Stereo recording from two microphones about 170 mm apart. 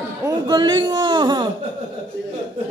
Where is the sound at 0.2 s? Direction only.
25° right (ahead or behind).